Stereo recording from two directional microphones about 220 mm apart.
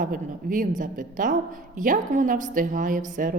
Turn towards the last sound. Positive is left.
turn(degrees=-35)  # may be behind; listen again after turning